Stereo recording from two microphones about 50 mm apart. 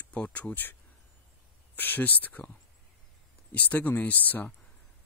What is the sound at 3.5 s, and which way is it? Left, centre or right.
Speech, left.